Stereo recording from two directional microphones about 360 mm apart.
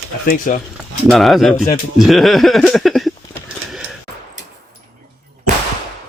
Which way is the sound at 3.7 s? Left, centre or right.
Centre.